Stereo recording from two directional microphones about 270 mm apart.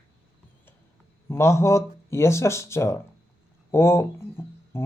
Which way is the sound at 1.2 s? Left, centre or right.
Centre.